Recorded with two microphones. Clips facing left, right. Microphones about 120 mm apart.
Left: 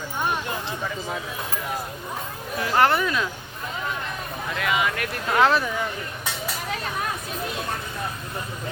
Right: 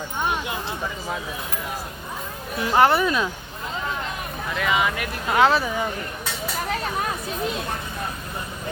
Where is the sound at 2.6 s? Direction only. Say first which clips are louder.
Right 2 dB; 15° right (ahead or behind).